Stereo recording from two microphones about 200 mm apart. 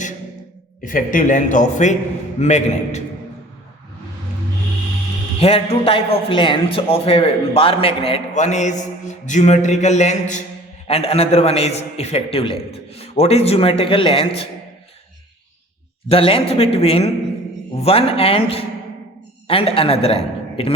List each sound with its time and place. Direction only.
0.9 s a man's voice: 40° left (ahead or behind)
5.4 s a man's voice: 30° left (ahead or behind)
16.0 s a man's voice: 30° left (ahead or behind)